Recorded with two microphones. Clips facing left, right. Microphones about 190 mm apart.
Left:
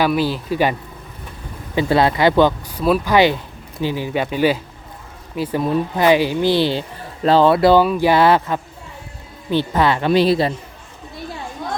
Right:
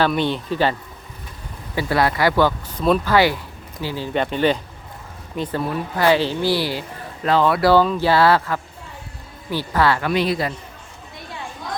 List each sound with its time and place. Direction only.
0.0 s speech: 5° left (ahead or behind)
1.7 s speech: 20° left (ahead or behind)
2.7 s speech: 5° left (ahead or behind)
3.1 s speech: 20° left (ahead or behind)